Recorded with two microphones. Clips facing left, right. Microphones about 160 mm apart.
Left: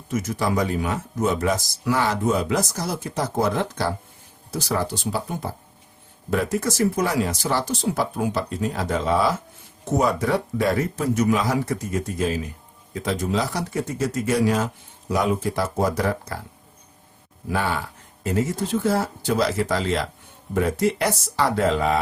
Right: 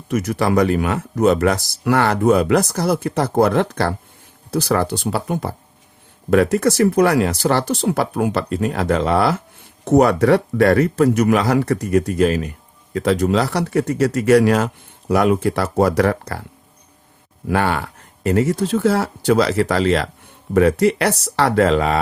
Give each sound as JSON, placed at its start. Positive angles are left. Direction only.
{"t": 0.1, "sound": "speech", "side_deg": -70}
{"t": 17.5, "sound": "speech", "side_deg": -70}